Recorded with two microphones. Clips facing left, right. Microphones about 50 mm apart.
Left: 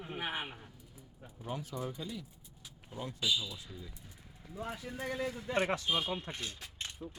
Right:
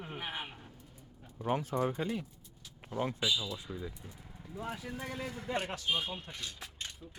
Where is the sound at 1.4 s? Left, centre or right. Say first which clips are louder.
Right 8 dB; right.